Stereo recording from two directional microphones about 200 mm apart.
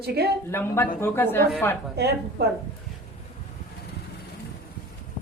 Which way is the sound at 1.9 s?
55° right (ahead or behind).